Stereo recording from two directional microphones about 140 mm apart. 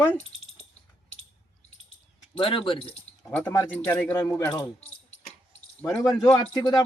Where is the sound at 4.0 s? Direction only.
15° left (ahead or behind).